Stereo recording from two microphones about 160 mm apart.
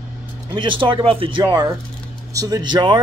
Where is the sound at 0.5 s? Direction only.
30° right (ahead or behind).